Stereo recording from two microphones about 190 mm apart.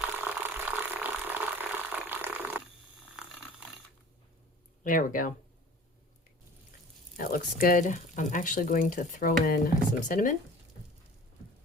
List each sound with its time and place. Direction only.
0.0 s a sound: 10° right (ahead or behind)
4.8 s speech: 45° left (ahead or behind)
7.2 s speech: 45° left (ahead or behind)